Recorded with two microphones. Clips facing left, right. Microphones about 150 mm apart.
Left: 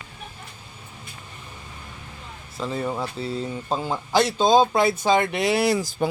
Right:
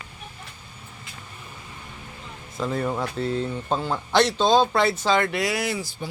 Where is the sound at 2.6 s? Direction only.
Centre (ahead or behind); by 5.7 s 30° left (ahead or behind).